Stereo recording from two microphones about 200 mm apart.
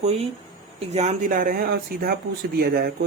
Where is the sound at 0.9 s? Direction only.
35° right (ahead or behind).